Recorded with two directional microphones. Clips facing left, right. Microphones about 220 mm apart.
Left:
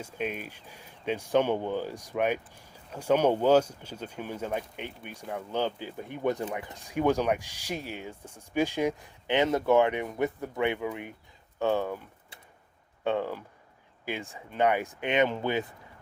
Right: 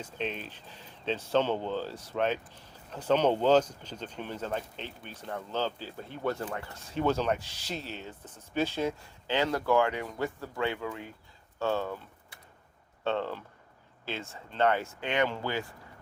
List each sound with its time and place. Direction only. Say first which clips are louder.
0.0 s speech: left 2 dB; 10° left (ahead or behind)
13.1 s speech: left 2 dB; 10° left (ahead or behind)